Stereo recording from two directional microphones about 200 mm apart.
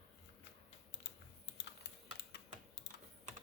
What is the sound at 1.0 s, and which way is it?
Typing, 60° left (ahead or behind).